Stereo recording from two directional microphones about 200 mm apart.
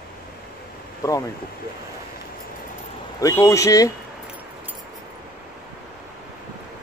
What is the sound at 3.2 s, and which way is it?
Speech, 15° left (ahead or behind).